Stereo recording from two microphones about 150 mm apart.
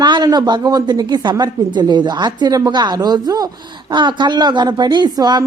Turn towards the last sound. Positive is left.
turn(degrees=-25)  # may be behind; listen again after turning